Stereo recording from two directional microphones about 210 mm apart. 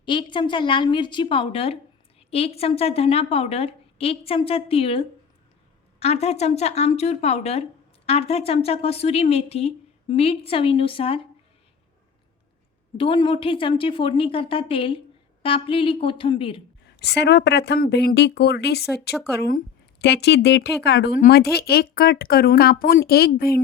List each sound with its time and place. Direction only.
0.0 s speech: 20° left (ahead or behind)
13.0 s speech: 25° left (ahead or behind)
17.0 s speech: 50° left (ahead or behind)